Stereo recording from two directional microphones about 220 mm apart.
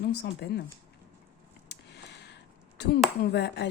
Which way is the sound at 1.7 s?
50° left (ahead or behind).